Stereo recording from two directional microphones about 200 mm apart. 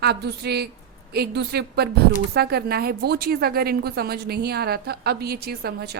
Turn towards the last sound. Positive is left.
turn(degrees=-50)  # may be behind; listen again after turning